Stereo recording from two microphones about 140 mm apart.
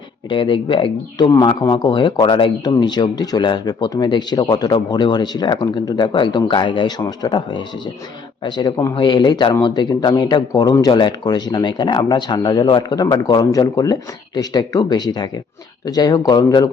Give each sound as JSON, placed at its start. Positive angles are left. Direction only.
{"t": 0.3, "sound": "speech", "side_deg": 35}